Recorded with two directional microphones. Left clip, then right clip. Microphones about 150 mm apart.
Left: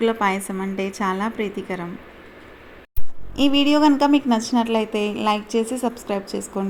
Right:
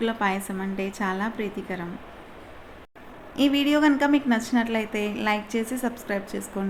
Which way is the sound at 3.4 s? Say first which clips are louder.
Left 4 dB; 25° left (ahead or behind).